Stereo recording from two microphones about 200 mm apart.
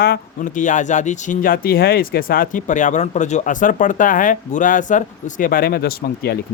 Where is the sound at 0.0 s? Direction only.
45° left (ahead or behind).